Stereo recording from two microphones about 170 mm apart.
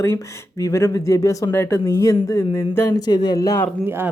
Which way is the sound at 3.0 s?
25° left (ahead or behind).